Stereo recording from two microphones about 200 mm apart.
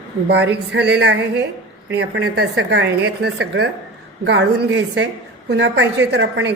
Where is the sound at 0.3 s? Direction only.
60° right (ahead or behind).